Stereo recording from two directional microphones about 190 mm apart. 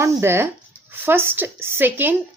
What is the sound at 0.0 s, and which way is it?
Speech, 15° right (ahead or behind).